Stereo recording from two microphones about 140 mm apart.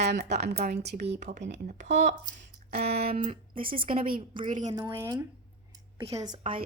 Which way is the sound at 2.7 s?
75° right (ahead or behind).